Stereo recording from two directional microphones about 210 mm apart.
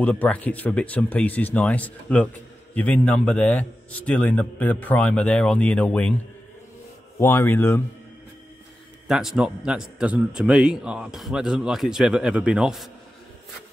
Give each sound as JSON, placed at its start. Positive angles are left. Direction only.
{"t": 0.0, "sound": "a man's voice", "side_deg": 5}
{"t": 7.2, "sound": "a man's voice", "side_deg": 10}
{"t": 9.0, "sound": "a man's voice", "side_deg": 0}